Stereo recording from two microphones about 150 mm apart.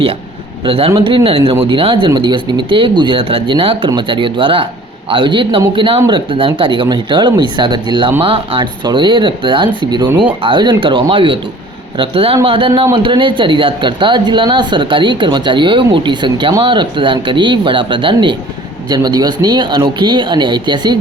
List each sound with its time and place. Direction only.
0.6 s a man's voice: 40° right (ahead or behind)